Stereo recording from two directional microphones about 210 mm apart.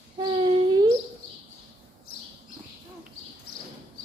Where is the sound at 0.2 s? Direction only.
20° right (ahead or behind).